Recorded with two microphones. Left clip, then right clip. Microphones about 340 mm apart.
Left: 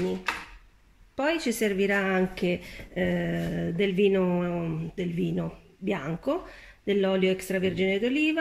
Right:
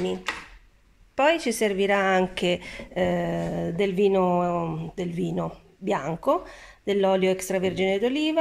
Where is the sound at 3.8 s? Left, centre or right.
Centre.